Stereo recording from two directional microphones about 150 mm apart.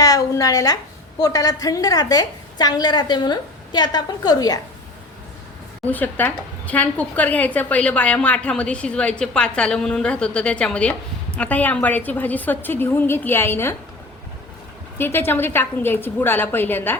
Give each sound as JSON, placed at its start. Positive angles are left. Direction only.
{"t": 0.0, "sound": "a woman's voice", "side_deg": 25}
{"t": 5.8, "sound": "a woman's voice", "side_deg": 10}
{"t": 14.9, "sound": "a woman's voice", "side_deg": 15}